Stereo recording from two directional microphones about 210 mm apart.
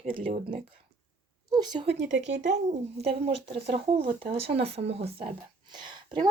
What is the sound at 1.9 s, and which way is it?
Speech, 60° right (ahead or behind).